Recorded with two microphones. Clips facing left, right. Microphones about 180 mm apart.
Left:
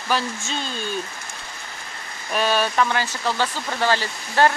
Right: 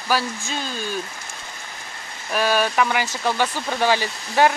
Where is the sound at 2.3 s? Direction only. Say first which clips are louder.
Right 1 dB; 10° right (ahead or behind).